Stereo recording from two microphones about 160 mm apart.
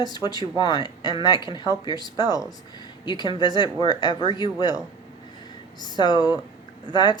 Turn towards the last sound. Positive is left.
turn(degrees=25)  # may be behind; listen again after turning